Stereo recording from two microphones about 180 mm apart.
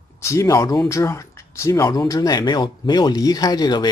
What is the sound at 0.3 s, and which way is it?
Speech, 15° left (ahead or behind).